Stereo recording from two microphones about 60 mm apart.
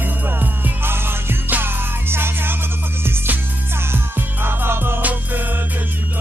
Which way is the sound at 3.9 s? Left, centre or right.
Right.